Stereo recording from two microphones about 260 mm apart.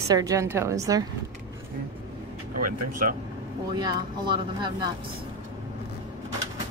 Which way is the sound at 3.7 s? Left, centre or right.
Centre.